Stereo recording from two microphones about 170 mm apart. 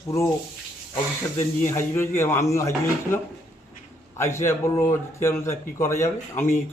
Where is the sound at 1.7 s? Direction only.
15° left (ahead or behind).